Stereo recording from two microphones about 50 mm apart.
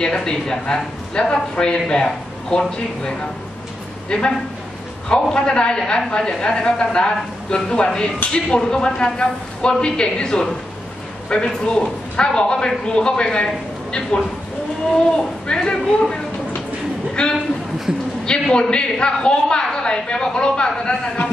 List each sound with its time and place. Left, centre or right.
0.0 s a woman's voice: centre
4.1 s a woman's voice: centre